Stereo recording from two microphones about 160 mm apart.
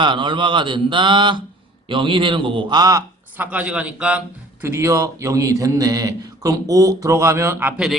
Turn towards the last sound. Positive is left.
turn(degrees=-5)  # may be behind; listen again after turning